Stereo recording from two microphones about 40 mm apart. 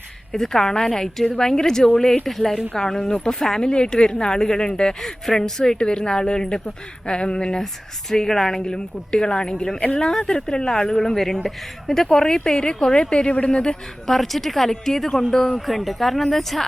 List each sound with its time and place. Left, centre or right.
0.3 s a woman's voice: centre
14.1 s a woman's voice: centre